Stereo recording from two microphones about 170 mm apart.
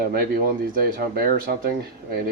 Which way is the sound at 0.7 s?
60° right (ahead or behind).